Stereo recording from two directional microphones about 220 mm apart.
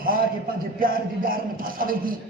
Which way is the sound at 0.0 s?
40° right (ahead or behind).